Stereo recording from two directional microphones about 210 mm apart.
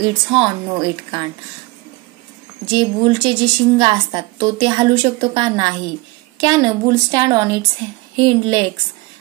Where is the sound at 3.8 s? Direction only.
25° right (ahead or behind).